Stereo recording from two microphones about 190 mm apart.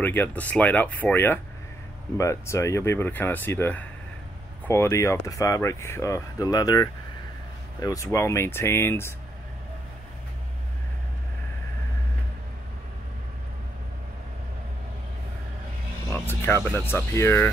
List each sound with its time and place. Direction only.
0.0 s speech: 10° left (ahead or behind)
16.1 s speech: 10° left (ahead or behind)